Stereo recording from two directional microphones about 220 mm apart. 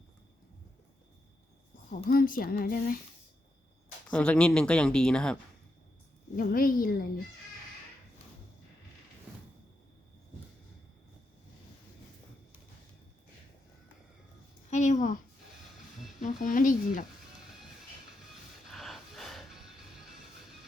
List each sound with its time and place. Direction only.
2.0 s speech: 40° left (ahead or behind)
4.1 s speech: 5° left (ahead or behind)
6.3 s speech: 40° left (ahead or behind)
14.7 s a sound: 35° left (ahead or behind)
16.2 s speech: 35° left (ahead or behind)
18.7 s music: centre (ahead or behind)